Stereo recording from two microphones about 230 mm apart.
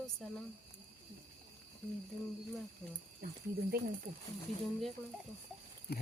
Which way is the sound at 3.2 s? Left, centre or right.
Right.